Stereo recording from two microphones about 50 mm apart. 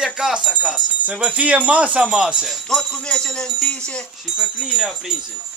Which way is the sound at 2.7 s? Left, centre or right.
Centre.